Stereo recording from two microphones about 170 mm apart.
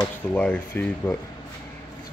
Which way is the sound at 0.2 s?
10° left (ahead or behind).